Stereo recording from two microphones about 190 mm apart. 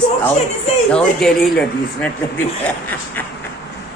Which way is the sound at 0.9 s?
5° left (ahead or behind).